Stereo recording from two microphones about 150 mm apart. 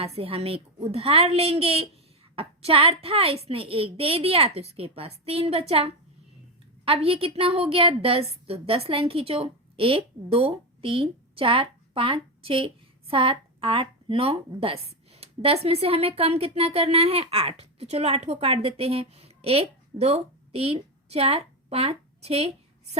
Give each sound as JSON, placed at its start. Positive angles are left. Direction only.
{"t": 0.0, "sound": "a woman's voice", "side_deg": -40}